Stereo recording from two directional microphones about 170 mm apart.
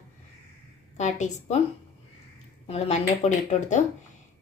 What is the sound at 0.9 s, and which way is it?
Speech, 45° left (ahead or behind).